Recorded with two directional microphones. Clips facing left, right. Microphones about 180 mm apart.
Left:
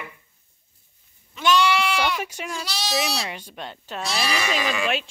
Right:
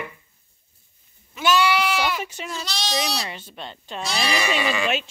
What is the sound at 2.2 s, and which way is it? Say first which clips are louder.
Speech: even; 10° left (ahead or behind).